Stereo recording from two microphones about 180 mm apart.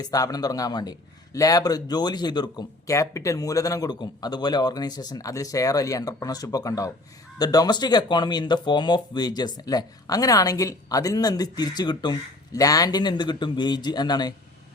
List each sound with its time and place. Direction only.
0.0 s a man's voice: 20° left (ahead or behind)